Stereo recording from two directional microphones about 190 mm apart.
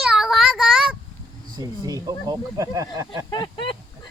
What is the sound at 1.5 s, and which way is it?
Speech, 20° right (ahead or behind).